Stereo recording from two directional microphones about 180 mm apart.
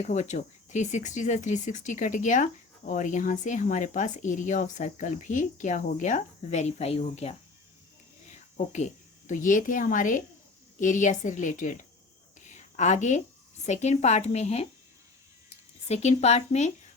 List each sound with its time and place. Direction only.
0.0 s speech: 40° left (ahead or behind)
12.5 s a sound: 40° left (ahead or behind)
13.7 s speech: 40° left (ahead or behind)
15.9 s speech: 40° left (ahead or behind)